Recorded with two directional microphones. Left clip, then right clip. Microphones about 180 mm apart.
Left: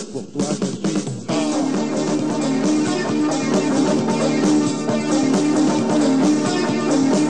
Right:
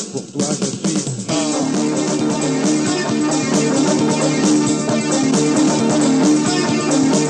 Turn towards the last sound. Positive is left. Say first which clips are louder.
# right 2 dB
turn(degrees=30)  # may be behind; listen again after turning